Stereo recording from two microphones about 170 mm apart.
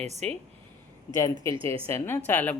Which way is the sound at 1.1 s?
20° left (ahead or behind).